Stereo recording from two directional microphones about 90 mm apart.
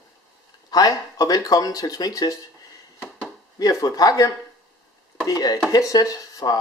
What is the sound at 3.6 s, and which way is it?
Speech, 45° left (ahead or behind).